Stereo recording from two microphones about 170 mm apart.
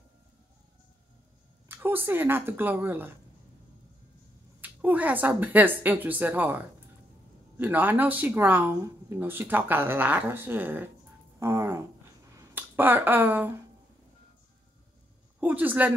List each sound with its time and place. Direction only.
1.7 s speech: 10° right (ahead or behind)
4.6 s speech: 10° right (ahead or behind)
11.3 s music: 15° right (ahead or behind)
12.4 s finger snapping: 10° right (ahead or behind)
15.4 s a woman's voice: 10° right (ahead or behind)